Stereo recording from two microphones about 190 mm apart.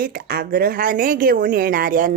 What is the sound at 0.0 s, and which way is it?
Speech, 50° right (ahead or behind).